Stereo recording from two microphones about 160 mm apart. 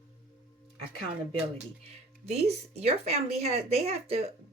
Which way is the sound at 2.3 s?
40° right (ahead or behind).